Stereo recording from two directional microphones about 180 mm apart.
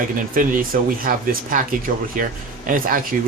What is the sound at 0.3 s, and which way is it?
Speech, 50° right (ahead or behind).